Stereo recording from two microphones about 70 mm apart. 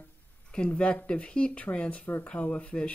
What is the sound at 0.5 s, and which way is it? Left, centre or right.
Speech, centre.